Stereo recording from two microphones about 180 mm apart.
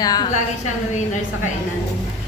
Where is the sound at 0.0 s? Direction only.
20° left (ahead or behind).